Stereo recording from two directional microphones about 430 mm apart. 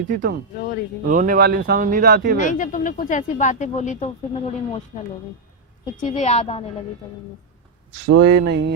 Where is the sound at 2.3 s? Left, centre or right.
Centre.